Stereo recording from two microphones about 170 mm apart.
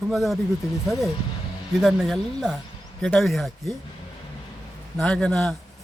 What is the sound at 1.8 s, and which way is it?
Speech, centre (ahead or behind).